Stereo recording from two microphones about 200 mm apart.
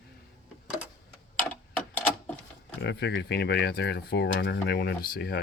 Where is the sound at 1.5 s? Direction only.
10° left (ahead or behind).